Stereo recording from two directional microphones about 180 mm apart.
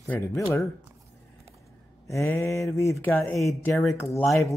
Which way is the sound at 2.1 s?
15° left (ahead or behind).